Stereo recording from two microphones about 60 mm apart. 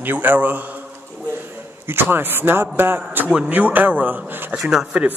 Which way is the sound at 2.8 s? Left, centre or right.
Right.